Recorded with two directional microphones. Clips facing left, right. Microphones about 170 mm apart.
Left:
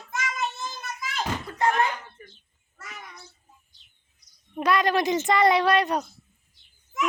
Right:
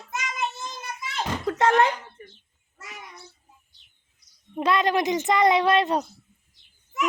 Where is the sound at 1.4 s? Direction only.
90° right.